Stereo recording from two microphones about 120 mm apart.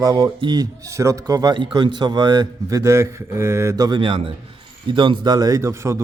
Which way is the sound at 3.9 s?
45° right (ahead or behind).